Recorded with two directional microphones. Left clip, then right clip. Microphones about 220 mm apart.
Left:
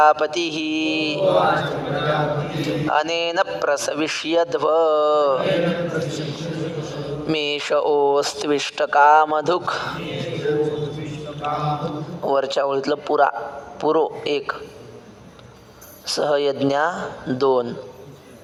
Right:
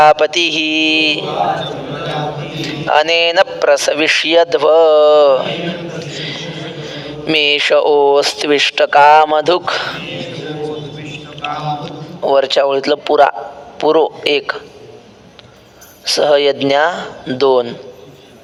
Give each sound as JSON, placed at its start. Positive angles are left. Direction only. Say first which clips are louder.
{"t": 0.0, "sound": "a man's voice", "louder": "right 7 dB", "side_deg": -45}
{"t": 2.4, "sound": "a man's voice", "louder": "right 2 dB", "side_deg": -45}
{"t": 11.0, "sound": "a sound", "louder": "right 3 dB", "side_deg": -45}
{"t": 12.2, "sound": "a man's voice", "louder": "right 8 dB", "side_deg": -45}
{"t": 16.0, "sound": "a man's voice", "louder": "right 9 dB", "side_deg": -45}